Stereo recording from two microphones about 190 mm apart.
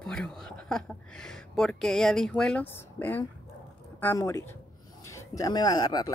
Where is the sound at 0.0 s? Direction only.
5° left (ahead or behind).